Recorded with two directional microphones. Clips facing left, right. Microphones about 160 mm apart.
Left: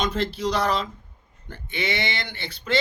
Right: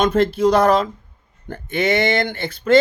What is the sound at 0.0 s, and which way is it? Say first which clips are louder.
Speech: right 10 dB; 50° right (ahead or behind).